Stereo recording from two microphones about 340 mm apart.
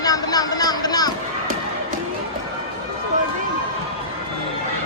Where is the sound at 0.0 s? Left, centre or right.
Centre.